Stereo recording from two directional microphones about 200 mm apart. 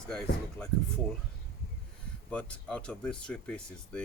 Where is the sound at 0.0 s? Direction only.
5° left (ahead or behind).